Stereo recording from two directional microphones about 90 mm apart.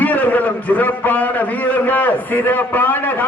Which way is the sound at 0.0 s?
20° left (ahead or behind).